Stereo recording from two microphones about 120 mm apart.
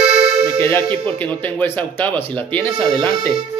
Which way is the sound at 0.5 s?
20° left (ahead or behind).